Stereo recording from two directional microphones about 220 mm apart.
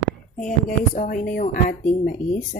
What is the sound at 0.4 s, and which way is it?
Speech, 35° left (ahead or behind).